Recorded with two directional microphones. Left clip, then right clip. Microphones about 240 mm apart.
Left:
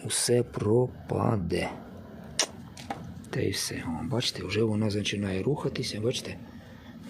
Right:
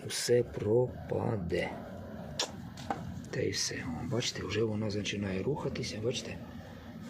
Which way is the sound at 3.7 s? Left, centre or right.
Left.